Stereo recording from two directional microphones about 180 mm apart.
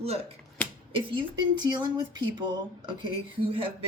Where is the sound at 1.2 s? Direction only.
25° right (ahead or behind).